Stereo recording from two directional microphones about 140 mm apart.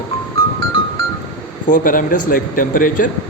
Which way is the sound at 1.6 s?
75° left (ahead or behind).